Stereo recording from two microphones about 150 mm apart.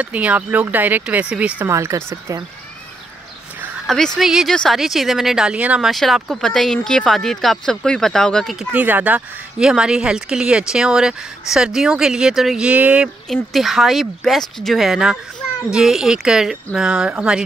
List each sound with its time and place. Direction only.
0.0 s speech: 10° right (ahead or behind)
1.6 s speech: 20° right (ahead or behind)
3.8 s speech: 5° left (ahead or behind)
8.7 s speech: 10° right (ahead or behind)